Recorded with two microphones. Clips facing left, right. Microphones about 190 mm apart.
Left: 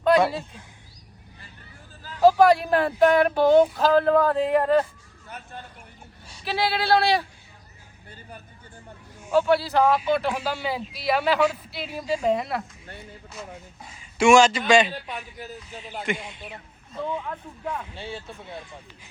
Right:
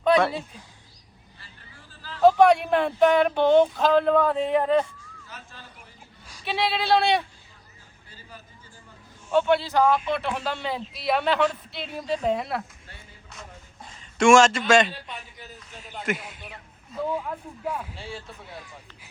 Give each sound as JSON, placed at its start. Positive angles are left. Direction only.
{"t": 0.0, "sound": "a sound", "side_deg": 0}
{"t": 2.2, "sound": "speech", "side_deg": 0}
{"t": 5.3, "sound": "horse", "side_deg": 60}
{"t": 6.4, "sound": "speech", "side_deg": 0}
{"t": 9.3, "sound": "speech", "side_deg": 0}
{"t": 13.8, "sound": "a sound", "side_deg": 5}
{"t": 14.7, "sound": "speech", "side_deg": 5}
{"t": 16.0, "sound": "speech", "side_deg": -5}
{"t": 17.9, "sound": "speech", "side_deg": 25}